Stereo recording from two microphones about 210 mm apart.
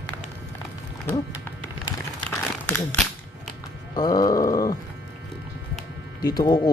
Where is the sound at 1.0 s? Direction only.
15° left (ahead or behind).